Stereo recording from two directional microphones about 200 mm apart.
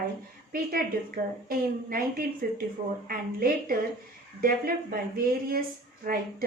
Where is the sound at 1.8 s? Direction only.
45° right (ahead or behind).